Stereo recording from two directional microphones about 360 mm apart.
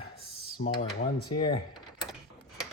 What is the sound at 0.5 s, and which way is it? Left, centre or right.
Speech, left.